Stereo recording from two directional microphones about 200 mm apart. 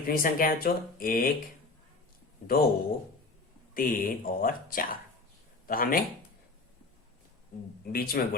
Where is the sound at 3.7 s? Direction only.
45° left (ahead or behind).